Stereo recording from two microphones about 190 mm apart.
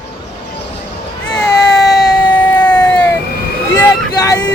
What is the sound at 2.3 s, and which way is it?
Vehicle, 10° left (ahead or behind).